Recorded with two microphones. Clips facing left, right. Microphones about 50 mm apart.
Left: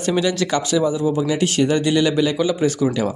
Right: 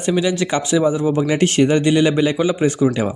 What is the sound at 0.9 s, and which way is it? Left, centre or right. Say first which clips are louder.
A man's voice: right 2 dB; right.